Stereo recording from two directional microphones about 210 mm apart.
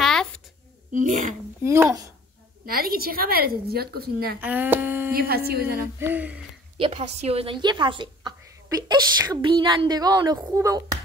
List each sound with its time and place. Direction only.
0.0 s a sound: centre (ahead or behind)
0.9 s speech: 40° right (ahead or behind)
1.6 s speech: 10° right (ahead or behind)
2.6 s a woman's voice: 45° right (ahead or behind)
4.4 s speech: 10° right (ahead or behind)
5.1 s a woman's voice: 45° right (ahead or behind)
5.9 s speech: 10° right (ahead or behind)
6.8 s a woman's voice: 25° right (ahead or behind)